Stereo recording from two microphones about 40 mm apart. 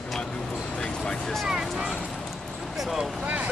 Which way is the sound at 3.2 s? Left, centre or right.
Right.